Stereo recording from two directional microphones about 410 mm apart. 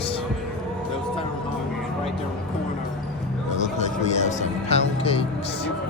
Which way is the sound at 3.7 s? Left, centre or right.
Centre.